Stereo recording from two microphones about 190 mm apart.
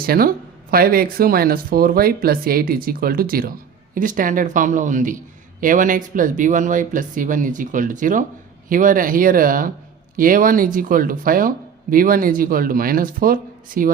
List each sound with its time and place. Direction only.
0.0 s speech: 50° right (ahead or behind)